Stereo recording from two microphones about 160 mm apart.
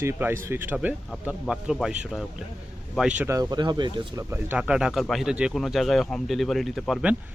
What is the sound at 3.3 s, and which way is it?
Speech, 25° right (ahead or behind).